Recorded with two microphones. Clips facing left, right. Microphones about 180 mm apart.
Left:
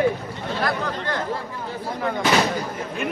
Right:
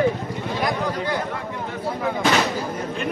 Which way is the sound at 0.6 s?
10° right (ahead or behind).